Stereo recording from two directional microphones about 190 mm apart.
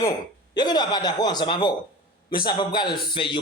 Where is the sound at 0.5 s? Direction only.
20° left (ahead or behind).